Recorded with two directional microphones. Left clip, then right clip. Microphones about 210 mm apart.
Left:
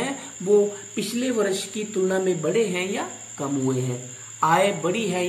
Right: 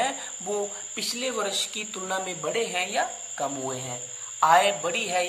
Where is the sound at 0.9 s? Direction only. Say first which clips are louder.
Left 3 dB; 50° right (ahead or behind).